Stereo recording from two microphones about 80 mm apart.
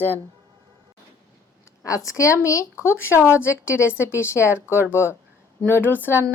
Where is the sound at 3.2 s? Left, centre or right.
Centre.